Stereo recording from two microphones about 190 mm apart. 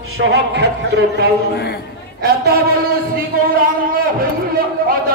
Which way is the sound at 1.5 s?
60° left (ahead or behind).